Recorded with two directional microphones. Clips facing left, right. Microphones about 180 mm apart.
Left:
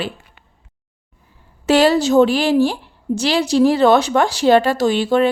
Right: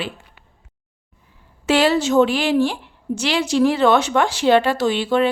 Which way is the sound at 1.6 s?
40° left (ahead or behind).